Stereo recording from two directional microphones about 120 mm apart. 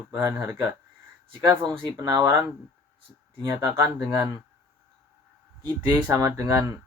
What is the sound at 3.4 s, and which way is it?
Speech, 30° right (ahead or behind).